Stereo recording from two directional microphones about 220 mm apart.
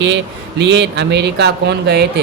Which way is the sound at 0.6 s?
55° right (ahead or behind).